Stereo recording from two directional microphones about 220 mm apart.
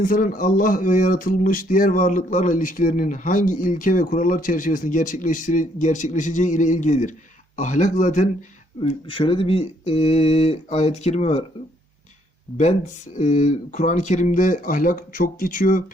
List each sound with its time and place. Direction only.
0.0 s speech: 40° left (ahead or behind)
8.8 s speech: 25° left (ahead or behind)
13.1 s speech: 35° left (ahead or behind)